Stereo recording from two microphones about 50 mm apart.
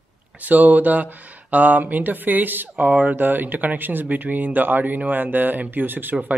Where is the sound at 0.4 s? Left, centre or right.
Right.